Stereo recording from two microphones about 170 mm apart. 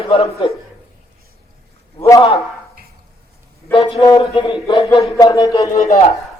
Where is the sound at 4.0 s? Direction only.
25° left (ahead or behind).